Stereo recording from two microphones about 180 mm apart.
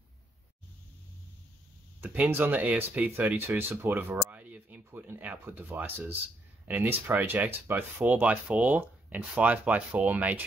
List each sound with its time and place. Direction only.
2.0 s speech: 10° right (ahead or behind)